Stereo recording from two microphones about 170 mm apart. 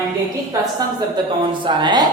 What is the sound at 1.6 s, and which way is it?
Speech, 25° right (ahead or behind).